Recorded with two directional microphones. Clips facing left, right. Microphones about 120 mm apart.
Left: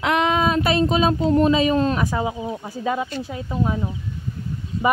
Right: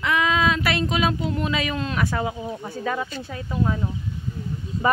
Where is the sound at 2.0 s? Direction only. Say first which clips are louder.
Left 2 dB; 15° left (ahead or behind).